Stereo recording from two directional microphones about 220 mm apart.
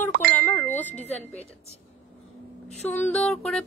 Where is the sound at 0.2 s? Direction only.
5° left (ahead or behind).